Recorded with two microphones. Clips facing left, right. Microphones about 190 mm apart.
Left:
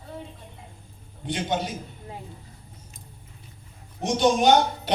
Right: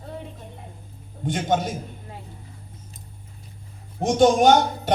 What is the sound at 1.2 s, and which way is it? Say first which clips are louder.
Speech: right 4 dB; 45° right (ahead or behind).